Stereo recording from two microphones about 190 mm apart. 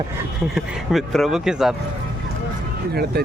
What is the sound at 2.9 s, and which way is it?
Speech, 55° right (ahead or behind).